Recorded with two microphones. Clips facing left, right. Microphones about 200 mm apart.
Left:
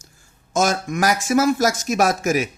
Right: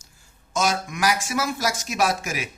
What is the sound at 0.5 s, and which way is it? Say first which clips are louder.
Speech: left 5 dB; 45° left (ahead or behind).